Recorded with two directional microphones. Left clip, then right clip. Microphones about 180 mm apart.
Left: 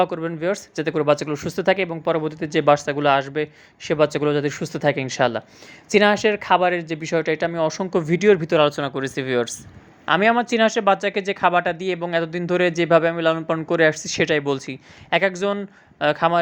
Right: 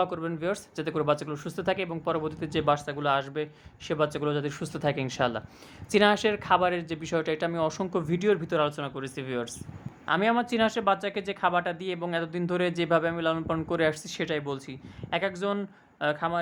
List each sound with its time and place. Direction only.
0.0 s speech: 15° left (ahead or behind)